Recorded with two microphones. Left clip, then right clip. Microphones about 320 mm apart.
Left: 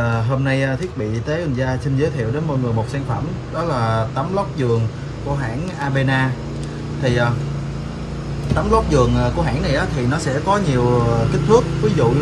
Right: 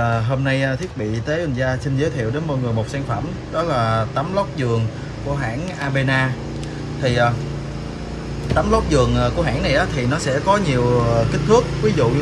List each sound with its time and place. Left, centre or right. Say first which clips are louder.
0.0 s speech: right 1 dB; centre
3.5 s speech: right 1 dB; centre
8.5 s speech: left 1 dB; centre